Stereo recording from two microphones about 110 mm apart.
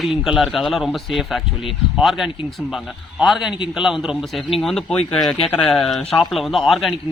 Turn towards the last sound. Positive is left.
turn(degrees=0)  # may be behind; listen again after turning